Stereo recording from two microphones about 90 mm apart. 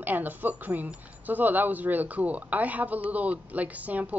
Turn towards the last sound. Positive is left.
turn(degrees=-15)  # may be behind; listen again after turning